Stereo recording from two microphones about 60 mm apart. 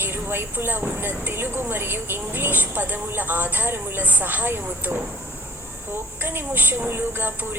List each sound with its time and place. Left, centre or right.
0.0 s a woman's voice: right
6.2 s a woman's voice: right